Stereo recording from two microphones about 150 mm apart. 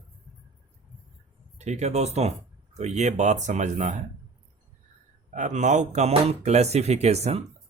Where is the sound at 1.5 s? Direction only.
50° right (ahead or behind).